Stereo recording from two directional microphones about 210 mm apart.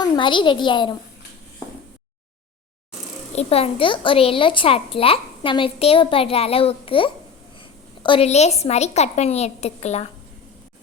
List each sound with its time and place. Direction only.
0.0 s a child's voice: 20° left (ahead or behind)
3.3 s a child's voice: 30° left (ahead or behind)